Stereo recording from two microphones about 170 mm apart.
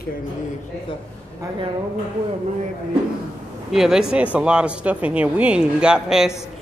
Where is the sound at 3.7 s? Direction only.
Centre (ahead or behind).